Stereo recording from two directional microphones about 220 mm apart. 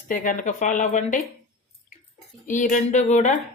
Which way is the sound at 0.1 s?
35° left (ahead or behind).